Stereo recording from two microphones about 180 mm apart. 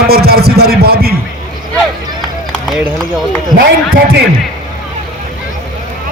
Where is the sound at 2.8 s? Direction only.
10° right (ahead or behind).